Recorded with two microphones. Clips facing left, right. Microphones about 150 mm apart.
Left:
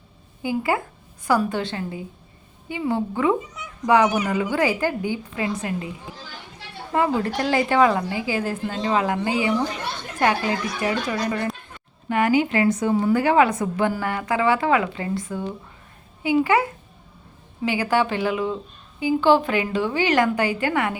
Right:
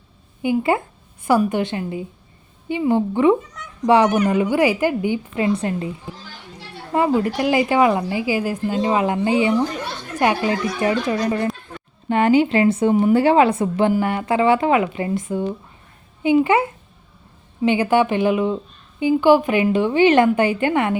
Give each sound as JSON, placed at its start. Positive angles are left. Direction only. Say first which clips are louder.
{"t": 0.4, "sound": "a woman's voice", "louder": "right 4 dB", "side_deg": -25}
{"t": 3.6, "sound": "cat", "louder": "even", "side_deg": 5}
{"t": 4.3, "sound": "a woman's voice", "louder": "right 5 dB", "side_deg": -15}
{"t": 5.5, "sound": "a woman's voice", "louder": "right 4 dB", "side_deg": -30}
{"t": 6.9, "sound": "a woman's voice", "louder": "right 3 dB", "side_deg": -20}